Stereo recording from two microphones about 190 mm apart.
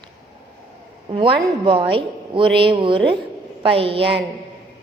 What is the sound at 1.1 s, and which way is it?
A woman's voice, 25° right (ahead or behind).